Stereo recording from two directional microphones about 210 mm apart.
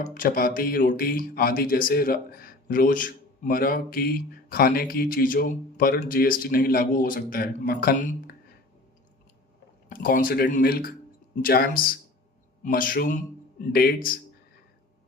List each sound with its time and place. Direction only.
0.0 s speech: 40° left (ahead or behind)
9.9 s a man's voice: 40° left (ahead or behind)